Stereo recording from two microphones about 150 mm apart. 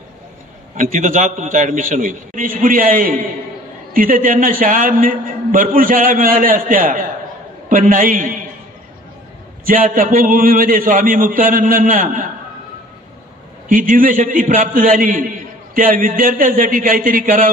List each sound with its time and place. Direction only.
0.7 s a man's voice: 60° right (ahead or behind)
9.7 s a man's voice: 65° right (ahead or behind)
13.7 s a man's voice: 65° right (ahead or behind)